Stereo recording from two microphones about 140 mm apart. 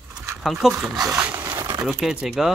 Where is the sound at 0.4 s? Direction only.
Centre (ahead or behind).